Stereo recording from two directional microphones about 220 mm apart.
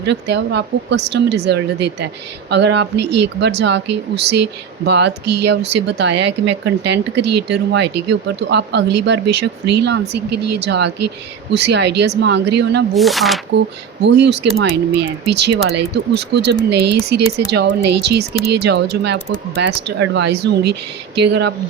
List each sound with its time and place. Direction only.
0.0 s speech: 50° right (ahead or behind)
12.9 s speech: centre (ahead or behind)
14.0 s speech: 50° right (ahead or behind)